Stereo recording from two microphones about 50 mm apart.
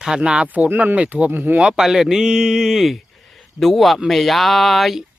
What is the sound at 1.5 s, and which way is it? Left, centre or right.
Speech, centre.